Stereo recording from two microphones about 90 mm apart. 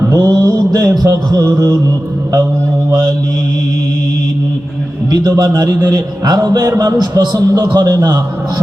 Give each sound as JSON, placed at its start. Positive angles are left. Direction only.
{"t": 0.1, "sound": "a man's voice", "side_deg": -45}
{"t": 5.4, "sound": "a man's voice", "side_deg": -45}